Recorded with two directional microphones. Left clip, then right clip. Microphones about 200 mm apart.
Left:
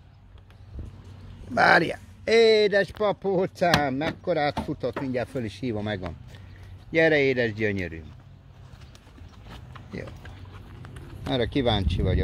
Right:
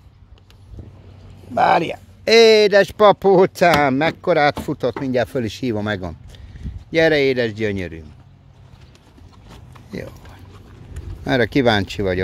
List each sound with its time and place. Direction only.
1.5 s speech: centre (ahead or behind)
2.2 s speech: 30° right (ahead or behind)
2.9 s speech: 55° right (ahead or behind); by 8.0 s 25° right (ahead or behind)
11.2 s speech: 40° right (ahead or behind)